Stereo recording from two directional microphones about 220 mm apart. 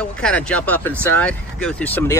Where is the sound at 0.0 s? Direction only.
5° left (ahead or behind).